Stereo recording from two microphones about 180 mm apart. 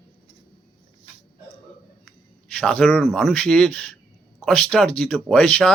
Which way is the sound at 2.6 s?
5° left (ahead or behind).